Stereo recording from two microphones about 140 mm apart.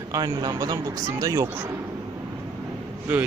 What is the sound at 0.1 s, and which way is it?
Speech, 25° right (ahead or behind).